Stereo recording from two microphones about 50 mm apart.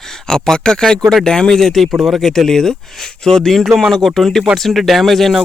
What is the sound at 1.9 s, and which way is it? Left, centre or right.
Speech, centre.